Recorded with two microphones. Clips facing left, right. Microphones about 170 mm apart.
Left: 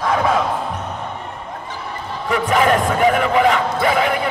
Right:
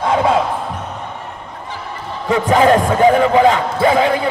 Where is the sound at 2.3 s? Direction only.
30° right (ahead or behind).